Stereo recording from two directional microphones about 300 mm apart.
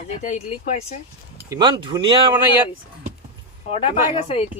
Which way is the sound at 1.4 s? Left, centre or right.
Centre.